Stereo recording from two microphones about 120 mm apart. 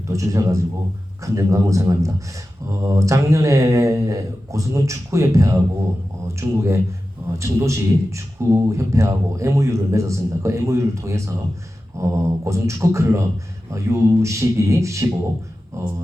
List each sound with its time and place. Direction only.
0.1 s speech: 25° right (ahead or behind)